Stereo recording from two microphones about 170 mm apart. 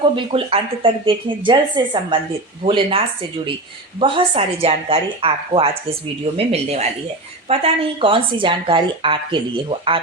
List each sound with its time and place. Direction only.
0.0 s a woman's voice: 30° right (ahead or behind)
4.0 s speech: 30° right (ahead or behind)